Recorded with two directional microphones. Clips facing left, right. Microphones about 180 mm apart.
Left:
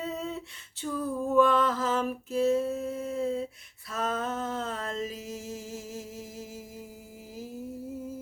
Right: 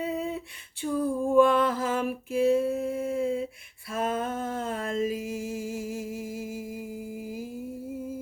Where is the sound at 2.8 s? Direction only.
10° right (ahead or behind).